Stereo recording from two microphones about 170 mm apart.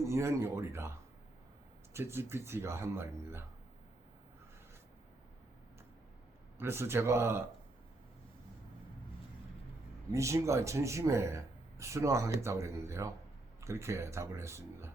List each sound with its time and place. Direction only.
0.0 s speech: 15° right (ahead or behind)
1.9 s speech: 15° right (ahead or behind)
6.6 s speech: 15° right (ahead or behind)
10.1 s speech: 15° right (ahead or behind)